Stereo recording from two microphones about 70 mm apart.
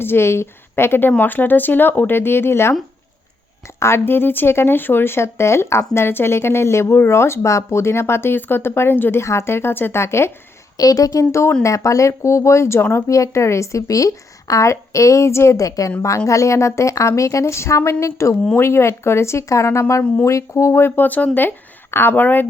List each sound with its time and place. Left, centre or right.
0.0 s a woman's voice: left
3.8 s speech: left
10.8 s a woman's voice: left
13.1 s a woman's voice: left